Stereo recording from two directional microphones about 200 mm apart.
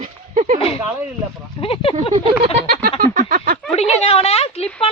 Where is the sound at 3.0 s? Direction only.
40° right (ahead or behind).